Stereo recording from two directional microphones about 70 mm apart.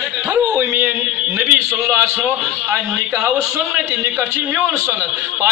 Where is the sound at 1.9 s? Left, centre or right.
Right.